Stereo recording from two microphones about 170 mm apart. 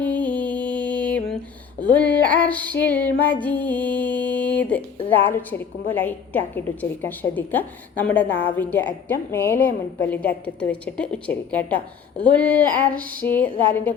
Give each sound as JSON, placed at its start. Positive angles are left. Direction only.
{"t": 0.0, "sound": "music", "side_deg": 10}
{"t": 1.8, "sound": "a woman's voice", "side_deg": 10}